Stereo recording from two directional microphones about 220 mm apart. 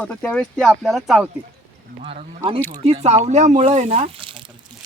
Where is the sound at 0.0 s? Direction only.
5° left (ahead or behind).